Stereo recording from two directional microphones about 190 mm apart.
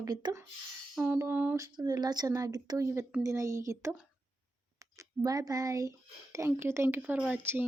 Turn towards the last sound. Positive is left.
turn(degrees=-10)  # may be behind; listen again after turning